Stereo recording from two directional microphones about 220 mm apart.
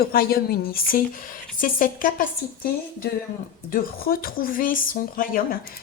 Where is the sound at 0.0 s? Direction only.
45° left (ahead or behind).